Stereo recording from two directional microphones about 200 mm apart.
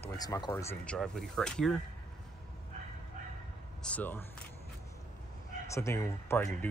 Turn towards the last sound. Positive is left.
turn(degrees=10)  # may be behind; listen again after turning